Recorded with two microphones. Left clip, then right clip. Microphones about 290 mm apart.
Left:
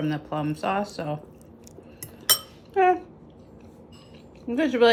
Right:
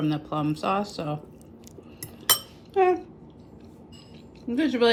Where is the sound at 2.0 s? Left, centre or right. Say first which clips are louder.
Left 1 dB; centre.